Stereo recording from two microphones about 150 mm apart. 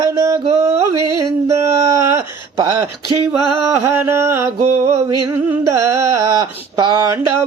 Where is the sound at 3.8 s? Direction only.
15° right (ahead or behind).